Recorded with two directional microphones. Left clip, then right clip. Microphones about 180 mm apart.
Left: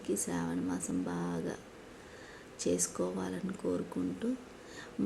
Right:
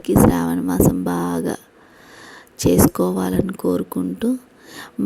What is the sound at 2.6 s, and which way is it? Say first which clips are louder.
Speech: right 17 dB; 60° right (ahead or behind).